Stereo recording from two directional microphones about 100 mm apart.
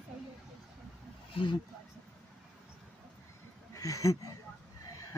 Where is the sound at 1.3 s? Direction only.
60° left (ahead or behind).